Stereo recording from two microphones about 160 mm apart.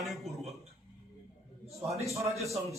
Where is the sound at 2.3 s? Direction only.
20° right (ahead or behind).